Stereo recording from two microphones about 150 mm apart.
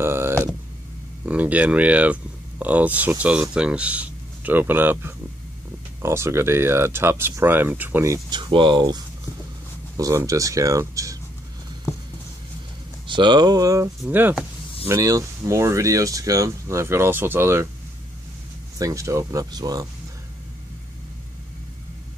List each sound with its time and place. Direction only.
0.0 s a sound: 15° right (ahead or behind)
1.2 s speech: 10° right (ahead or behind)
13.0 s speech: 30° right (ahead or behind)
14.0 s speech: 10° right (ahead or behind)
14.9 s speech: 20° right (ahead or behind)
18.8 s speech: 20° right (ahead or behind)